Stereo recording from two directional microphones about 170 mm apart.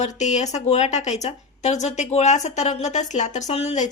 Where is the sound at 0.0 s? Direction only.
45° left (ahead or behind).